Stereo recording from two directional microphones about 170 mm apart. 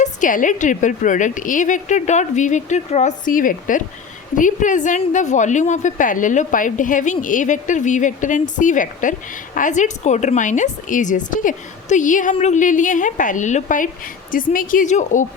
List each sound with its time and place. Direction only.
0.0 s a woman's voice: 50° left (ahead or behind)